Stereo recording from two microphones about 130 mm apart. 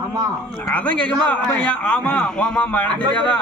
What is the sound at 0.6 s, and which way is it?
A man's voice, 10° left (ahead or behind).